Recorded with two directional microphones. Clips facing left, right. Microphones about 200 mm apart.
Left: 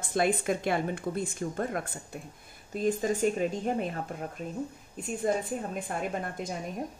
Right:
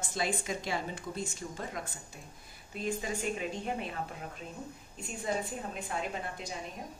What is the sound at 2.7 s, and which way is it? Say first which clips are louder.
Speech: left 7 dB; 45° left (ahead or behind).